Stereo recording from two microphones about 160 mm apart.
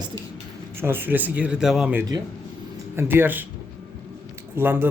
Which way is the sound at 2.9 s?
15° right (ahead or behind).